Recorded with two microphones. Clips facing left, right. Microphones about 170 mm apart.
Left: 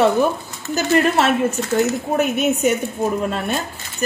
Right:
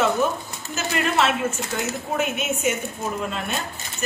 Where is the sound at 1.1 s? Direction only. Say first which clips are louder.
Left 5 dB; 40° left (ahead or behind).